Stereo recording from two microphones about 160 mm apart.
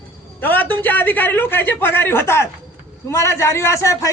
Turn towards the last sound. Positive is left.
turn(degrees=20)  # may be behind; listen again after turning